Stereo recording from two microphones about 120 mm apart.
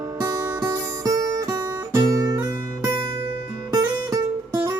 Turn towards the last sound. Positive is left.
turn(degrees=-30)  # may be behind; listen again after turning